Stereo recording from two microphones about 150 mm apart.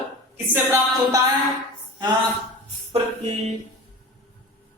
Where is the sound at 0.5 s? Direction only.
20° right (ahead or behind).